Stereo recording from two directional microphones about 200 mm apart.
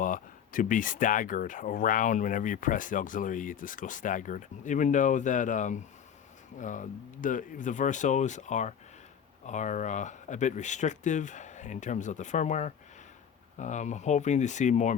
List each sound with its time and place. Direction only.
0.0 s speech: 40° left (ahead or behind)